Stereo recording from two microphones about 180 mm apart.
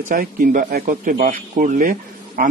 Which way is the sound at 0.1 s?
50° right (ahead or behind).